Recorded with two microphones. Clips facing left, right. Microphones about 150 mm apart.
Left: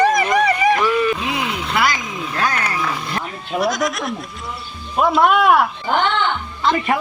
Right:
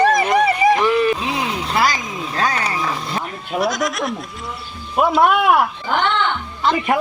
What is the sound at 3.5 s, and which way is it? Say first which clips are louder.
Speech: even; centre (ahead or behind).